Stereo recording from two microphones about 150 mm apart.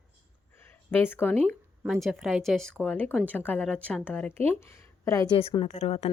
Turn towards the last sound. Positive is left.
turn(degrees=45)  # may be behind; listen again after turning